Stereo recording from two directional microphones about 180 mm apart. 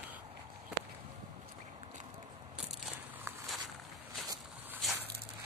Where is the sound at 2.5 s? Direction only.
5° right (ahead or behind).